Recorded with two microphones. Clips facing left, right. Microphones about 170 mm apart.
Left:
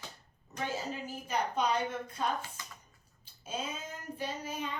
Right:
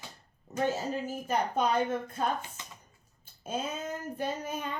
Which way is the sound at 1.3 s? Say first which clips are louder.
Right 2 dB; 50° right (ahead or behind).